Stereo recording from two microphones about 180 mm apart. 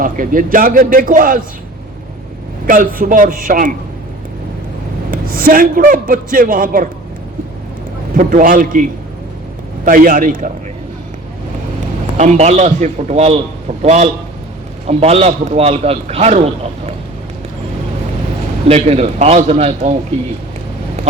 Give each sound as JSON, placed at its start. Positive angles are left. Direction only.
{"t": 0.0, "sound": "a man's voice", "side_deg": -50}
{"t": 2.6, "sound": "a man's voice", "side_deg": -50}
{"t": 5.1, "sound": "a man's voice", "side_deg": -55}
{"t": 8.1, "sound": "a man's voice", "side_deg": -50}
{"t": 12.1, "sound": "a man's voice", "side_deg": -40}
{"t": 18.7, "sound": "a man's voice", "side_deg": -35}